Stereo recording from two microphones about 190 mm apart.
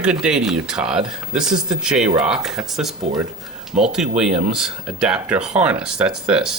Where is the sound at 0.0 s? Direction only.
5° right (ahead or behind).